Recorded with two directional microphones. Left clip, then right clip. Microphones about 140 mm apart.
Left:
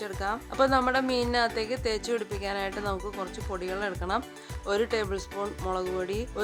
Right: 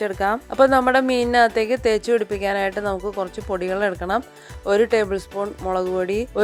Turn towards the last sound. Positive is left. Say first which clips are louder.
# right 10 dB
turn(degrees=-45)  # may be behind; listen again after turning